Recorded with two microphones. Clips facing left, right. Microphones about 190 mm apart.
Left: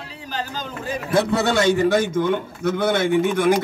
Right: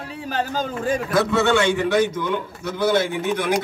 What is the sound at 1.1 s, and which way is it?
A man's voice, 30° left (ahead or behind).